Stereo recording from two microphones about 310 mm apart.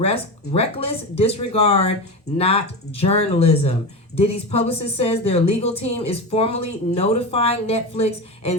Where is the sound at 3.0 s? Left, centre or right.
Centre.